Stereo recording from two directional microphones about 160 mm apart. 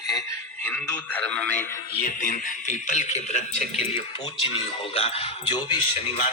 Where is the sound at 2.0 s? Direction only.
55° left (ahead or behind).